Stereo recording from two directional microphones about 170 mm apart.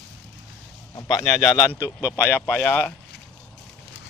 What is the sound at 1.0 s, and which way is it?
Speech, 20° left (ahead or behind).